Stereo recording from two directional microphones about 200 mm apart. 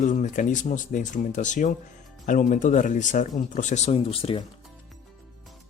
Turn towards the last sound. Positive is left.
turn(degrees=30)  # may be behind; listen again after turning